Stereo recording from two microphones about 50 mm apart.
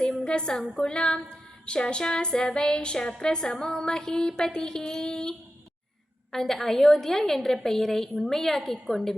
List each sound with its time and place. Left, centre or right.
0.3 s speech: centre
6.3 s speech: centre